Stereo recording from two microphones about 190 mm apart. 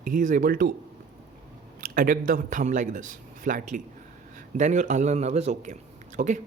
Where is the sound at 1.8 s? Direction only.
45° right (ahead or behind).